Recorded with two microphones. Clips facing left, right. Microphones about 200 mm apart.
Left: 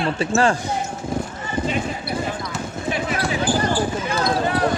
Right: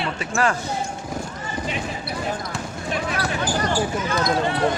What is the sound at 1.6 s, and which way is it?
Basketball bounce, centre (ahead or behind).